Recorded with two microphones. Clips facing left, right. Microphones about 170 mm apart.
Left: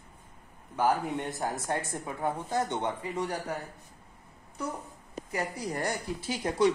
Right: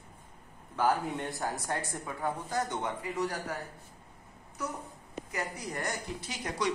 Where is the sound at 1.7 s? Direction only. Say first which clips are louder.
Left 3 dB; 25° left (ahead or behind).